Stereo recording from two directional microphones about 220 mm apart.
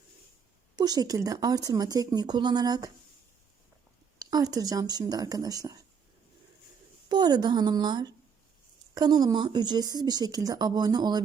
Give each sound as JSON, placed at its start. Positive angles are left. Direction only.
{"t": 0.8, "sound": "speech", "side_deg": -15}
{"t": 4.2, "sound": "speech", "side_deg": -15}
{"t": 7.1, "sound": "speech", "side_deg": -20}